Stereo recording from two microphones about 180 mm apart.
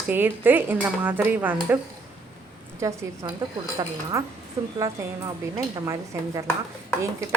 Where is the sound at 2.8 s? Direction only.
20° right (ahead or behind).